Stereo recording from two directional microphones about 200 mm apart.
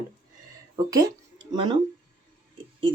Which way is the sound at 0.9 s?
20° right (ahead or behind).